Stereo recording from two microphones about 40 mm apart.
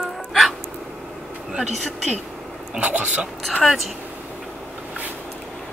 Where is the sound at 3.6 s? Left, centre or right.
Centre.